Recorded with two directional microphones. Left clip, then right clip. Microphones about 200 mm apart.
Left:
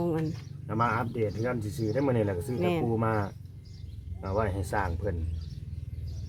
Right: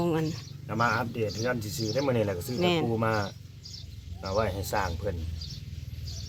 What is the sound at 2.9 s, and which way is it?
Speech, 35° left (ahead or behind).